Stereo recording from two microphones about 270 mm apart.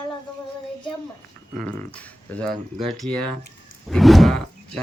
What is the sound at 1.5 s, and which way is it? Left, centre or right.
Speech, centre.